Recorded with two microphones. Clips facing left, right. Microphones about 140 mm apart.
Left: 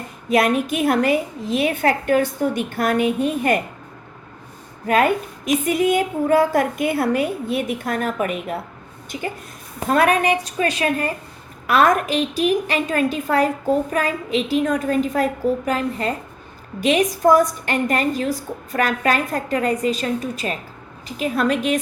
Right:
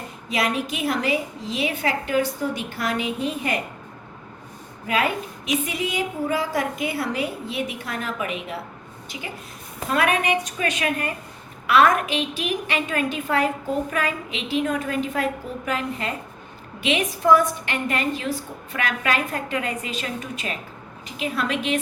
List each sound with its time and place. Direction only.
0.3 s a woman's voice: 55° left (ahead or behind)
4.9 s a woman's voice: 50° left (ahead or behind)